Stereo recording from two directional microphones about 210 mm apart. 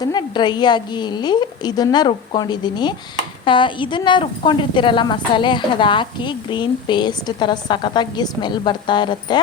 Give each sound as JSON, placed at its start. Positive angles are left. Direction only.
{"t": 0.0, "sound": "a woman's voice", "side_deg": 20}